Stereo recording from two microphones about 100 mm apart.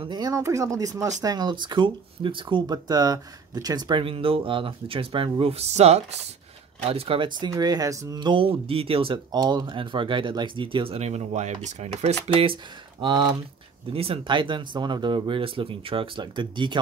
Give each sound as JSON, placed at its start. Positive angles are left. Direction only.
{"t": 0.2, "sound": "speech", "side_deg": -35}
{"t": 2.6, "sound": "speech", "side_deg": -40}
{"t": 6.9, "sound": "speech", "side_deg": -70}
{"t": 7.2, "sound": "speech", "side_deg": -45}
{"t": 8.2, "sound": "speech", "side_deg": -55}
{"t": 9.3, "sound": "speech", "side_deg": -45}
{"t": 13.0, "sound": "speech", "side_deg": -50}
{"t": 13.9, "sound": "speech", "side_deg": -70}